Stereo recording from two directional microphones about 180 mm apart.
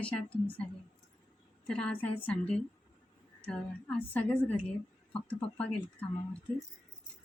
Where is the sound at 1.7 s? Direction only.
5° left (ahead or behind).